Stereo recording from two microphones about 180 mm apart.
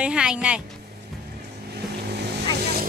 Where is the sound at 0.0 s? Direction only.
5° right (ahead or behind).